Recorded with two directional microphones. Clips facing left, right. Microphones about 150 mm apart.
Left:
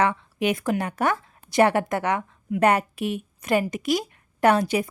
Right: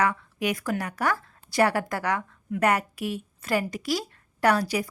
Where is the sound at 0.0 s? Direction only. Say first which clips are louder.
Left 3 dB; 25° left (ahead or behind).